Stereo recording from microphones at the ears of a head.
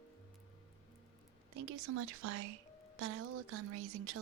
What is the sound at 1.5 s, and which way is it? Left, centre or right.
A woman's voice, right.